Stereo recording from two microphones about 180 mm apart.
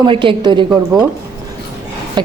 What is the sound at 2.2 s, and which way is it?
Speech, 25° right (ahead or behind).